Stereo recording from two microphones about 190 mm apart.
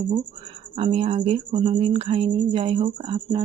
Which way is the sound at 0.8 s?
30° right (ahead or behind).